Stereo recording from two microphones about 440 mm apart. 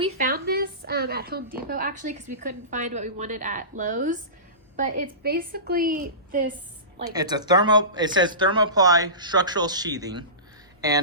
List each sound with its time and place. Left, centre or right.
0.0 s a woman's voice: centre
7.1 s speech: centre